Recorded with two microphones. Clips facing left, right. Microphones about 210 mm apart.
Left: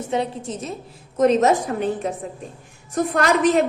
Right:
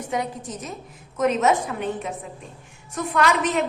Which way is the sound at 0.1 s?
25° left (ahead or behind).